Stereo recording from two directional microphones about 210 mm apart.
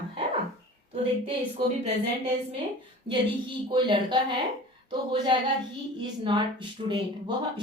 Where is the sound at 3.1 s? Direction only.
25° right (ahead or behind).